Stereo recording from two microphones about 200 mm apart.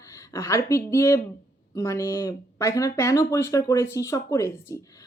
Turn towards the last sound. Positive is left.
turn(degrees=15)  # may be behind; listen again after turning